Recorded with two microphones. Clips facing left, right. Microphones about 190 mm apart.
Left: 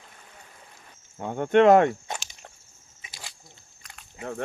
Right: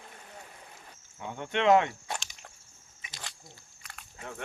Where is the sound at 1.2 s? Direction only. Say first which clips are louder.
Left 10 dB; 50° left (ahead or behind).